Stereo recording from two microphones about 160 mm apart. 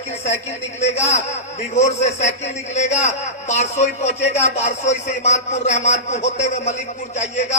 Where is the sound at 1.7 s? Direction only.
40° left (ahead or behind).